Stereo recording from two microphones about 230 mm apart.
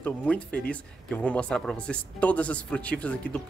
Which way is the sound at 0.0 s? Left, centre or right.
Centre.